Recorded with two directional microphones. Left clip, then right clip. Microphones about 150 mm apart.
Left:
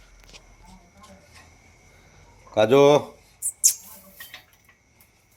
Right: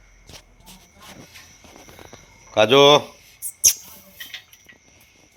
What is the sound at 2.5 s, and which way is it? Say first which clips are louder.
Speech: right 3 dB; 10° left (ahead or behind).